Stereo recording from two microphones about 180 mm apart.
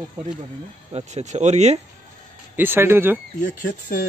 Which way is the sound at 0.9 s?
40° right (ahead or behind).